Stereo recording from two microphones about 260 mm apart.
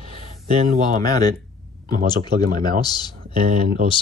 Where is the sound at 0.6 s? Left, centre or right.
Right.